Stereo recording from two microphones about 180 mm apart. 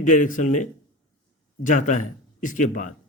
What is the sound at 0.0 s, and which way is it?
A man's voice, 45° left (ahead or behind).